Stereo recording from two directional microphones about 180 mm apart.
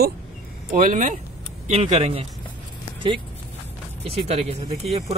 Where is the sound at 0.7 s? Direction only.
50° right (ahead or behind).